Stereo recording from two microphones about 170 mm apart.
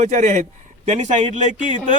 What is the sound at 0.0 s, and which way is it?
Speech, 45° right (ahead or behind).